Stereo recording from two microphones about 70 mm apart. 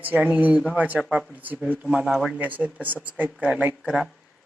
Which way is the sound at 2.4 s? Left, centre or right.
Right.